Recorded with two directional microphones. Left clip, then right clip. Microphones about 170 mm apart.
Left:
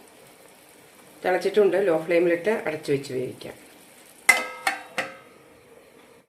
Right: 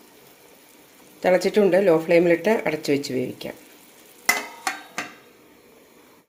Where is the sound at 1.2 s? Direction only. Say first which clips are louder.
Right 2 dB; 45° right (ahead or behind).